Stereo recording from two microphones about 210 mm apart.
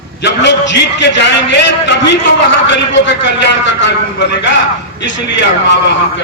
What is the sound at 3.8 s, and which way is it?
A man's voice, 60° left (ahead or behind).